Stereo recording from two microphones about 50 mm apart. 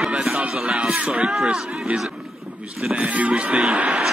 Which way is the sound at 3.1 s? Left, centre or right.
Right.